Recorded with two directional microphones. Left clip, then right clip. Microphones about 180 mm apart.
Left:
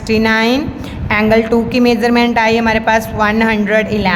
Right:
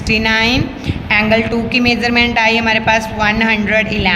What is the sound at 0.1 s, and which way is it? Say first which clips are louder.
A woman's voice: left 1 dB; 60° left (ahead or behind).